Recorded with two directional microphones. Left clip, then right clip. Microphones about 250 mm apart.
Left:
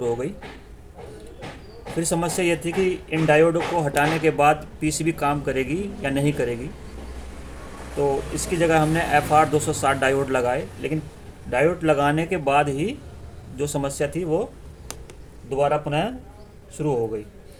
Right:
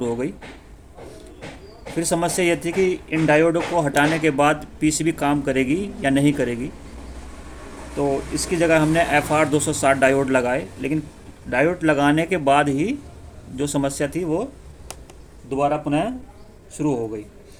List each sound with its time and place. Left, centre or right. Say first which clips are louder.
2.0 s speech: right 3 dB; right
8.5 s speech: right 2 dB; right
15.4 s speech: even; centre